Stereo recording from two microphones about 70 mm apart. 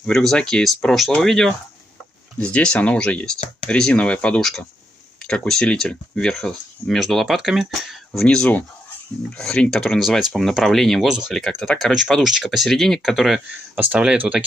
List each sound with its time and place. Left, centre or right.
0.0 s speech: centre
2.3 s speech: centre
4.4 s speech: centre
8.3 s speech: centre
11.1 s speech: centre
11.3 s speech: centre
12.2 s speech: centre
13.7 s speech: centre